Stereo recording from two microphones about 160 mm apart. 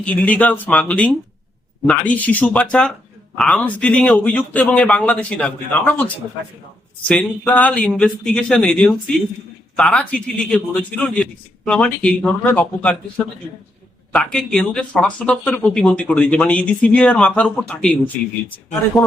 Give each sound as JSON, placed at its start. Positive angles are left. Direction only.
{"t": 0.0, "sound": "speech", "side_deg": 10}
{"t": 7.1, "sound": "speech", "side_deg": 10}